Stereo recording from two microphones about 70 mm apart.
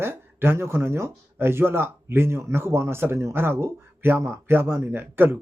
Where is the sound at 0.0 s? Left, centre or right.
Right.